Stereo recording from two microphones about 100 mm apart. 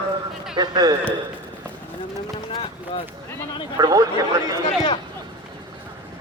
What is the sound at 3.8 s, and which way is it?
Speech, 40° right (ahead or behind).